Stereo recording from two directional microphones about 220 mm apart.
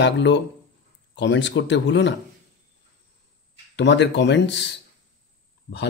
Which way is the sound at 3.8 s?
50° left (ahead or behind).